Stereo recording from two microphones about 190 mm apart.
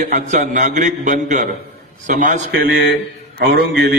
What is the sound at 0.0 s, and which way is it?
A man's voice, 40° right (ahead or behind).